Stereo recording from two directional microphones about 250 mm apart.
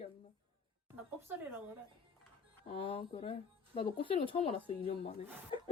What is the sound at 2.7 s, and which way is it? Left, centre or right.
A woman's voice, left.